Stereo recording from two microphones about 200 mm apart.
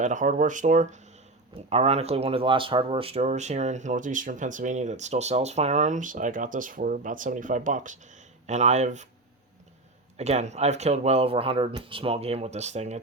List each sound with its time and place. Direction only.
0.0 s speech: 40° right (ahead or behind)
10.2 s speech: 35° right (ahead or behind)